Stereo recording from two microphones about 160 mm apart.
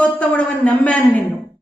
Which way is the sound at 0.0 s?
10° left (ahead or behind).